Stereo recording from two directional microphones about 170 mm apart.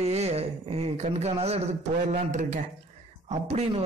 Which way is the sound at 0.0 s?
40° right (ahead or behind).